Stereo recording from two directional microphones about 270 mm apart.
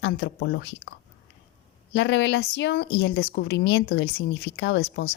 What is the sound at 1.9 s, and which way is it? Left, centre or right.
Speech, left.